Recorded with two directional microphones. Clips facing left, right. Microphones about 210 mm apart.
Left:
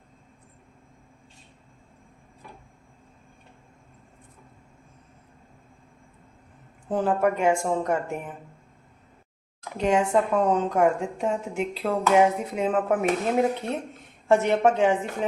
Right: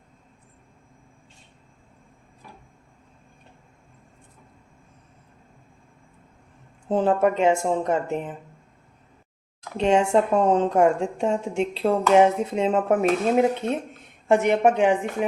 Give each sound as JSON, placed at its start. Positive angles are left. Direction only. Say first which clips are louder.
{"t": 6.8, "sound": "speech", "louder": "right 3 dB", "side_deg": -25}
{"t": 9.7, "sound": "a woman's voice", "louder": "right 3 dB", "side_deg": -25}